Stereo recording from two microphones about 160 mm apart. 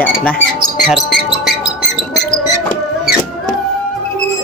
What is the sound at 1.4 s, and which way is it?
Music, centre (ahead or behind).